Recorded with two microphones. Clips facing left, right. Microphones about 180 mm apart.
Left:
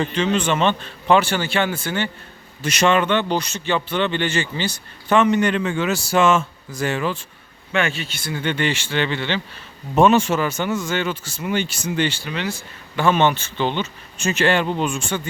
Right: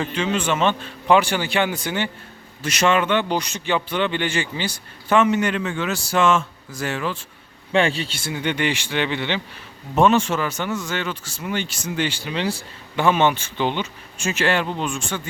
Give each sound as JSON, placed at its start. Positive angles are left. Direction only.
{"t": 0.0, "sound": "speech", "side_deg": -10}
{"t": 2.6, "sound": "speech", "side_deg": -5}
{"t": 7.7, "sound": "speech", "side_deg": -30}
{"t": 8.3, "sound": "speech", "side_deg": -15}
{"t": 9.9, "sound": "speech", "side_deg": 5}
{"t": 12.2, "sound": "speech", "side_deg": -30}
{"t": 13.0, "sound": "speech", "side_deg": -10}